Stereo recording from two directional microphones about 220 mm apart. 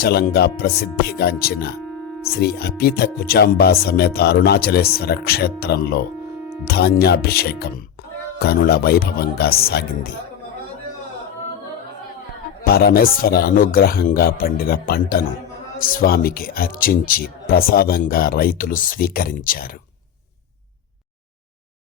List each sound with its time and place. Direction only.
0.0 s speech: 45° left (ahead or behind)
12.6 s speech: 45° left (ahead or behind)